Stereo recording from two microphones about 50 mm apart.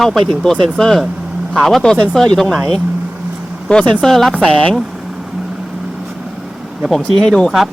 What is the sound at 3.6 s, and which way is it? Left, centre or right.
Speech, centre.